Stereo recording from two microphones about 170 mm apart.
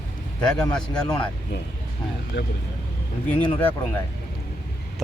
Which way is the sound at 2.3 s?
90° left.